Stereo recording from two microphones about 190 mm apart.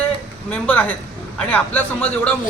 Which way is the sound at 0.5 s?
10° left (ahead or behind).